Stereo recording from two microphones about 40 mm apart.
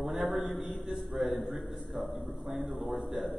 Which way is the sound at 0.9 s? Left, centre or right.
Centre.